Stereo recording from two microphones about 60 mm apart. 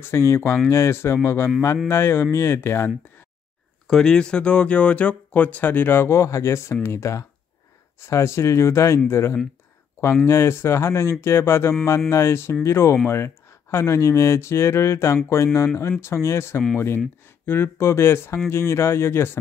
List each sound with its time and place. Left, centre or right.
0.0 s speech: left
3.8 s speech: centre; by 19.3 s left